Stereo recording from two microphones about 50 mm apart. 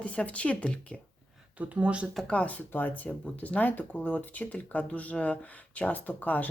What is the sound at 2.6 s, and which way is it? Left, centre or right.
Speech, left.